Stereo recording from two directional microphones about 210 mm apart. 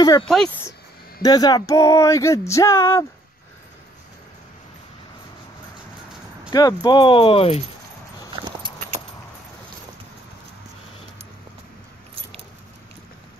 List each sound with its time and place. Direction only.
0.0 s speech: 20° left (ahead or behind)
6.5 s speech: 20° left (ahead or behind)
8.4 s clip-clop: 20° right (ahead or behind)